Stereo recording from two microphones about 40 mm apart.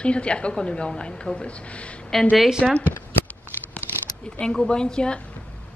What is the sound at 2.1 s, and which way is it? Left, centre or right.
Speech, centre.